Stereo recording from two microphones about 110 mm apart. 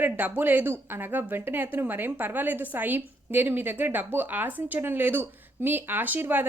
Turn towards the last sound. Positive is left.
turn(degrees=-15)  # may be behind; listen again after turning